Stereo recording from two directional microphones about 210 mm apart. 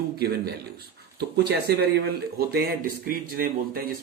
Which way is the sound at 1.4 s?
50° right (ahead or behind).